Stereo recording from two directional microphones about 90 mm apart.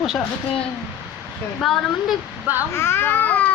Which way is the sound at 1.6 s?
5° left (ahead or behind).